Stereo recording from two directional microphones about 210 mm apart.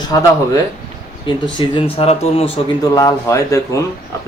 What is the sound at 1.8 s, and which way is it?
Speech, 25° left (ahead or behind).